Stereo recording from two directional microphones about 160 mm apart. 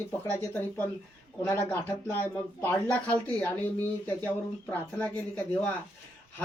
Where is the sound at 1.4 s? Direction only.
15° left (ahead or behind).